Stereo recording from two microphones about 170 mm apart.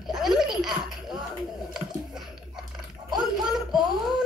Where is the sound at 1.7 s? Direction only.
Centre (ahead or behind).